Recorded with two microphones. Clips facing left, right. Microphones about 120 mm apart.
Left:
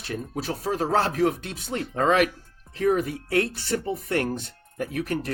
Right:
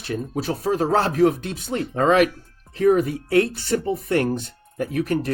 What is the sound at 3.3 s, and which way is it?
Speech, 20° right (ahead or behind).